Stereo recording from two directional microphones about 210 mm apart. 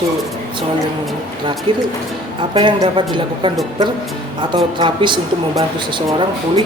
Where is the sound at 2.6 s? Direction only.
25° right (ahead or behind).